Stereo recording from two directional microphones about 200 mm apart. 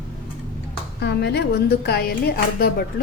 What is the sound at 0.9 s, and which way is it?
A woman's voice, 55° left (ahead or behind).